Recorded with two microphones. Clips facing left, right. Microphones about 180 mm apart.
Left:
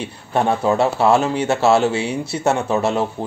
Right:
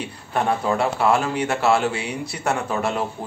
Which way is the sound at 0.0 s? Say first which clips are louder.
Left 4 dB; 25° left (ahead or behind).